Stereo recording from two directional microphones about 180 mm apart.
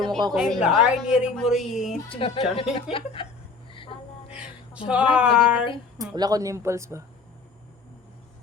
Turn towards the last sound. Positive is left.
turn(degrees=-15)  # may be behind; listen again after turning